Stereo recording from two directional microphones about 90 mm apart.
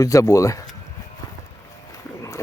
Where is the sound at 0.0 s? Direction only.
35° left (ahead or behind).